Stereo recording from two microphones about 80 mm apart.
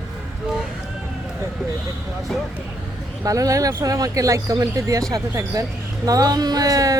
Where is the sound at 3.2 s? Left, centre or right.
Right.